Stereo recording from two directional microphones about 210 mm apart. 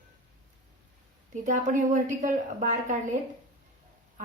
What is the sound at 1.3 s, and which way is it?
A woman's voice, 35° right (ahead or behind).